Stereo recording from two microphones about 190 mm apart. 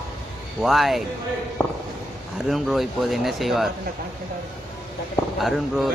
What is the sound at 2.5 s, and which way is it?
Speech, centre (ahead or behind).